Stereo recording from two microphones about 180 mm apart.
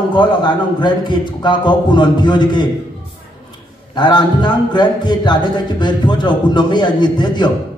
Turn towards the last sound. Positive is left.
turn(degrees=25)  # may be behind; listen again after turning